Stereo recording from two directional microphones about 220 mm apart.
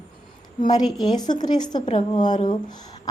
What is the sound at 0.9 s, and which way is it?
A woman's voice, 15° left (ahead or behind).